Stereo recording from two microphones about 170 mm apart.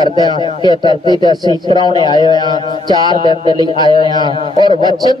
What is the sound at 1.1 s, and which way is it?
Speech, 25° right (ahead or behind).